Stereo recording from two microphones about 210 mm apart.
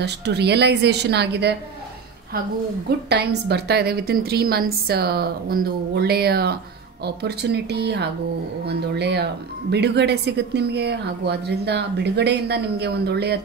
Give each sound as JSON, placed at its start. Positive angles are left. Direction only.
{"t": 0.0, "sound": "speech", "side_deg": -50}
{"t": 3.1, "sound": "speech", "side_deg": -50}